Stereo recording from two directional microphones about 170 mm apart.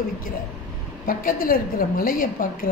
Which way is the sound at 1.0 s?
55° left (ahead or behind).